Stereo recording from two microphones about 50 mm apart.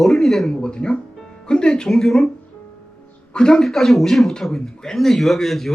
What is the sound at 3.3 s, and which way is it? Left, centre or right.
A man's voice, centre.